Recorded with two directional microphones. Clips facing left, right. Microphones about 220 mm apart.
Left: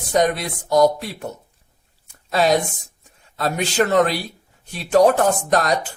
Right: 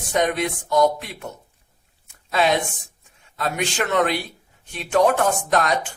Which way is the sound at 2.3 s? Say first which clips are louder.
Left 3 dB; 40° left (ahead or behind).